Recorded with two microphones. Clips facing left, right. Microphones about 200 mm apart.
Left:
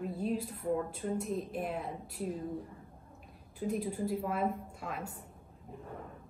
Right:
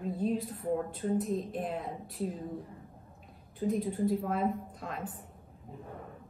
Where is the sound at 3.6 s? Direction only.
Centre (ahead or behind).